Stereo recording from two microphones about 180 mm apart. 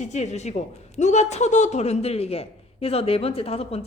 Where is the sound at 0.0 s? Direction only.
40° left (ahead or behind).